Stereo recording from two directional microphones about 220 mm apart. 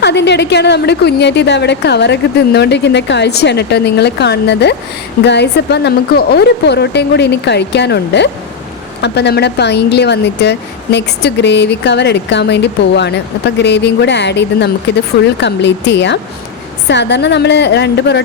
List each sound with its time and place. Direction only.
0.0 s speech: 50° left (ahead or behind)